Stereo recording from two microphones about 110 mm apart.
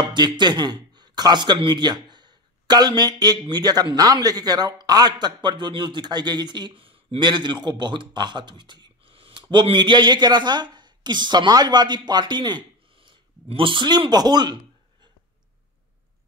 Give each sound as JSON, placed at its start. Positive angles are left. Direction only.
{"t": 0.0, "sound": "a man's voice", "side_deg": -45}